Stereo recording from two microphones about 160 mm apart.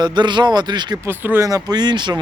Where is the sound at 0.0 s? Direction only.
30° right (ahead or behind).